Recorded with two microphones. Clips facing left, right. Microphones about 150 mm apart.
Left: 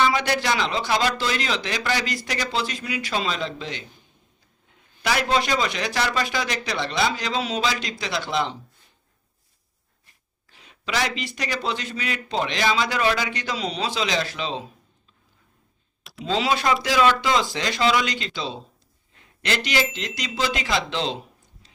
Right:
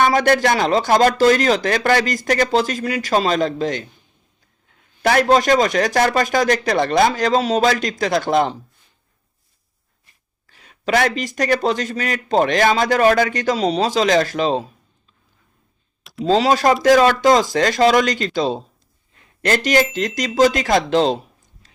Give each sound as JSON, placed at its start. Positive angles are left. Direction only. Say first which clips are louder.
{"t": 0.0, "sound": "speech", "louder": "right 7 dB", "side_deg": -50}
{"t": 5.0, "sound": "speech", "louder": "right 8 dB", "side_deg": -50}
{"t": 10.8, "sound": "speech", "louder": "right 8 dB", "side_deg": -50}
{"t": 16.2, "sound": "speech", "louder": "right 8 dB", "side_deg": -40}